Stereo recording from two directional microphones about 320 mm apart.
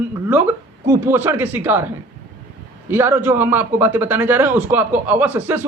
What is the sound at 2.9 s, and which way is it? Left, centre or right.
A man's voice, centre.